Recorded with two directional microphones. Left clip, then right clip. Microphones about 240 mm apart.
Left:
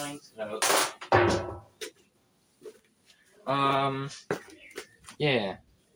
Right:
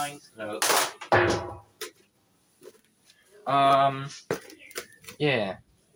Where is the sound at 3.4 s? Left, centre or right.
Centre.